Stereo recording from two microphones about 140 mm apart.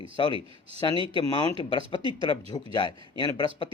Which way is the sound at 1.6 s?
35° left (ahead or behind).